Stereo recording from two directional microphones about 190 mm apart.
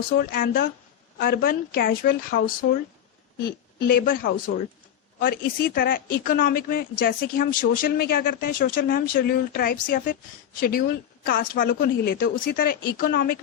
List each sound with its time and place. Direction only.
0.2 s a woman's voice: 50° left (ahead or behind)